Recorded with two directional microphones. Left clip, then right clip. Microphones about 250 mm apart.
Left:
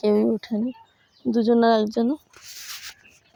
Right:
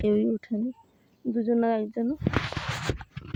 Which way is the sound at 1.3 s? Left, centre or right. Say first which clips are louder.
Left 7 dB; left.